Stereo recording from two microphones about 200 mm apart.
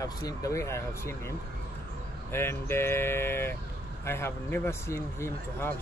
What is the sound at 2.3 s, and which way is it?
Speech, 10° left (ahead or behind).